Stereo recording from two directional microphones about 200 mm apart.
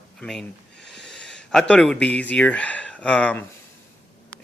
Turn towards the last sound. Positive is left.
turn(degrees=5)  # may be behind; listen again after turning